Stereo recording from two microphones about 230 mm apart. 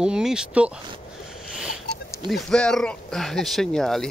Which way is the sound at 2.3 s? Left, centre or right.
Centre.